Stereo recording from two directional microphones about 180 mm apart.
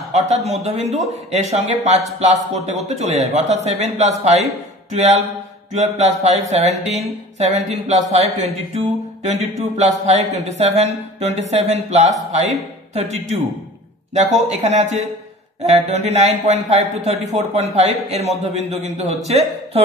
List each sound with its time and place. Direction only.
0.3 s speech: 35° right (ahead or behind)